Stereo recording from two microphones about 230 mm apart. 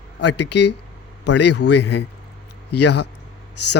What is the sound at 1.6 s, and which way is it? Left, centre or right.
Speech, left.